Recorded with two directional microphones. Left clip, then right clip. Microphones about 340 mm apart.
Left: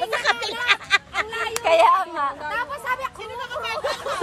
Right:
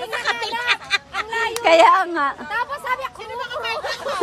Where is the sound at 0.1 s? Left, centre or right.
Centre.